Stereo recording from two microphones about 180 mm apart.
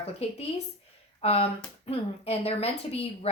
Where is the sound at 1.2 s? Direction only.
35° left (ahead or behind).